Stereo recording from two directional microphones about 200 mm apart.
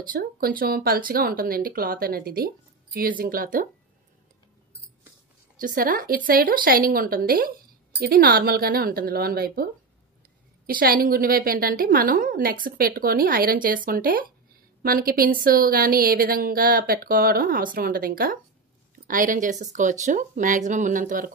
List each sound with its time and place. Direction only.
0.1 s a woman's voice: 45° right (ahead or behind)
5.6 s a woman's voice: 45° right (ahead or behind)
10.7 s a woman's voice: 45° right (ahead or behind)